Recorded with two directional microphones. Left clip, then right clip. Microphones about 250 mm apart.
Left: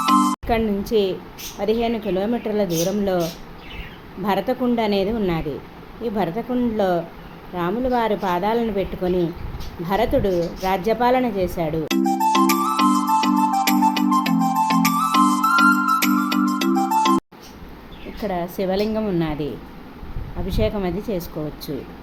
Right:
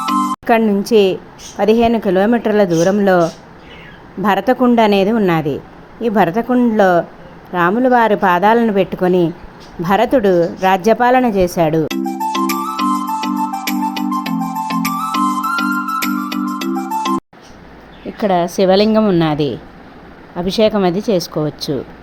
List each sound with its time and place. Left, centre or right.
0.0 s music: centre
0.4 s a woman's voice: right
11.9 s music: centre
18.2 s a woman's voice: right